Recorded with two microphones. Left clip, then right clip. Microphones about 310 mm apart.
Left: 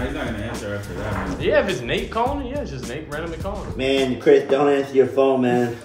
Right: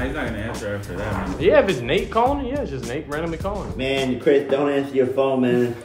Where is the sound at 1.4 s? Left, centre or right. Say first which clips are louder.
Right 3 dB; right.